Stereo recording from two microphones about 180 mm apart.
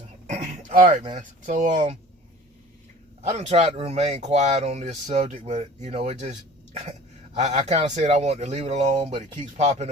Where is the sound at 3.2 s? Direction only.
35° right (ahead or behind).